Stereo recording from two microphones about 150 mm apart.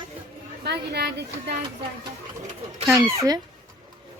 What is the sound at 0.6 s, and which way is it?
Speech, 90° right.